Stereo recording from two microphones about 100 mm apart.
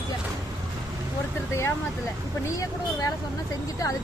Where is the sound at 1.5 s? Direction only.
25° left (ahead or behind).